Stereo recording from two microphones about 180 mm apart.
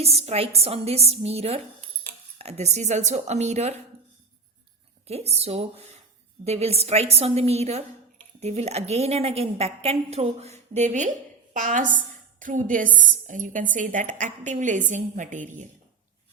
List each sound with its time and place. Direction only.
0.0 s a woman's voice: 35° right (ahead or behind)
5.0 s a woman's voice: 35° right (ahead or behind)